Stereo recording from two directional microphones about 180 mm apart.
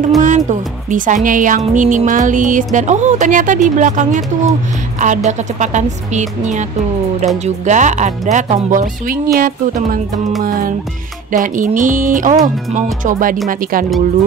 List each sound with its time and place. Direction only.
0.2 s speech: 45° right (ahead or behind)
11.3 s speech: 45° right (ahead or behind)